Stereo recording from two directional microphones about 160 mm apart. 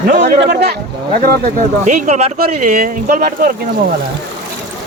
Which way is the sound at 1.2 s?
65° right (ahead or behind).